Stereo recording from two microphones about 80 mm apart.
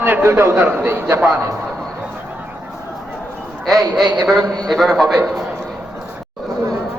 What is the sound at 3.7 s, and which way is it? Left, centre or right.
A man's voice, centre.